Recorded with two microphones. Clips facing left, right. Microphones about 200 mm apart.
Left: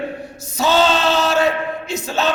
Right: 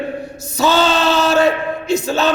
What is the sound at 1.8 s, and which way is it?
Speech, 35° right (ahead or behind).